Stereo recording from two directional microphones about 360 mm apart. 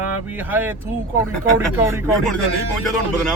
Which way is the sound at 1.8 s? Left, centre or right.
Centre.